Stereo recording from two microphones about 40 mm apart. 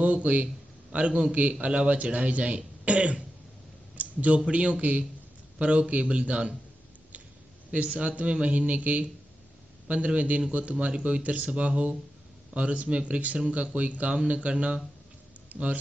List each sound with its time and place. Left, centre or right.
0.0 s a sound: right
0.9 s a man's voice: right
3.9 s a sound: right
4.5 s speech: right
7.7 s speech: right
15.5 s speech: right